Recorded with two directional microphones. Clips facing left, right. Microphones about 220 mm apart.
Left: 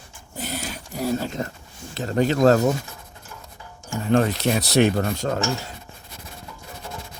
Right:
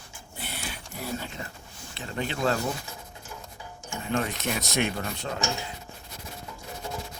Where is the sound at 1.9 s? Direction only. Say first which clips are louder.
Left 11 dB; 40° left (ahead or behind).